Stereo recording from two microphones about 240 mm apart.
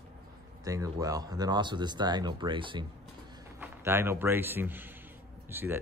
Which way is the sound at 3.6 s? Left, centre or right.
Centre.